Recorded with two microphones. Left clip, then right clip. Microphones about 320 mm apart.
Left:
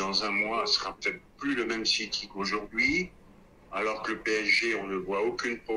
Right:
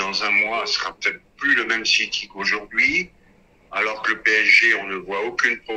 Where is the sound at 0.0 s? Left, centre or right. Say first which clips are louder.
Right 9 dB; right.